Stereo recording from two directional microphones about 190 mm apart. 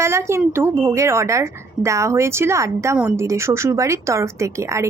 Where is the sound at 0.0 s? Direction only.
15° right (ahead or behind).